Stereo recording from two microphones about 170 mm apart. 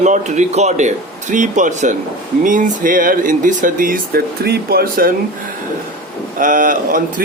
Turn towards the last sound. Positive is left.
turn(degrees=-55)  # may be behind; listen again after turning